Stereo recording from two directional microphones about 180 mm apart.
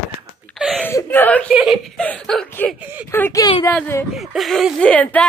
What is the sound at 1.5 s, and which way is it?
Speech, 5° right (ahead or behind).